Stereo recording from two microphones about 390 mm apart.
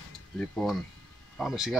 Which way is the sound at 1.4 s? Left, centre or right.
Centre.